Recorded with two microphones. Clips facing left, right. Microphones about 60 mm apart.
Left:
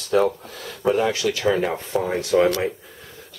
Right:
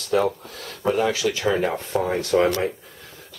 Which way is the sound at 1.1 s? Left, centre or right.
Centre.